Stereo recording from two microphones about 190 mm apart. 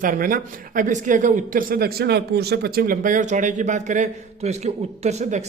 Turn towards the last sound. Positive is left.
turn(degrees=-35)  # may be behind; listen again after turning